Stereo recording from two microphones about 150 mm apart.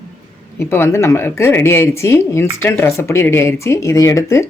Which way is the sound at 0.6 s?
15° left (ahead or behind).